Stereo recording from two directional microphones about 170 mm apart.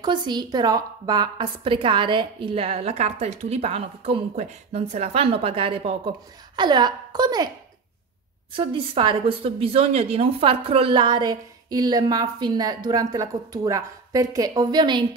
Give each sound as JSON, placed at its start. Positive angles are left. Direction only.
{"t": 0.0, "sound": "a woman's voice", "side_deg": -25}
{"t": 8.5, "sound": "a woman's voice", "side_deg": -30}